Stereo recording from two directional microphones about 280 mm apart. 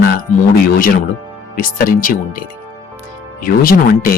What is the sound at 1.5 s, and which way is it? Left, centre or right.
Speech, left.